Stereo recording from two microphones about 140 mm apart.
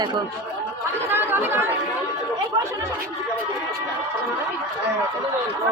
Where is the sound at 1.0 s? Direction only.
15° right (ahead or behind).